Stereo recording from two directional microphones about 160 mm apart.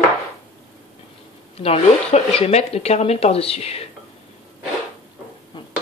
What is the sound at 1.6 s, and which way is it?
Speech, 40° left (ahead or behind).